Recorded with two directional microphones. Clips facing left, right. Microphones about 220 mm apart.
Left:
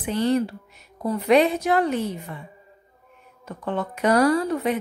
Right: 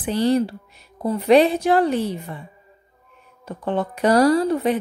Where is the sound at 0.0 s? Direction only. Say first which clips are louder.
Right 3 dB; 35° right (ahead or behind).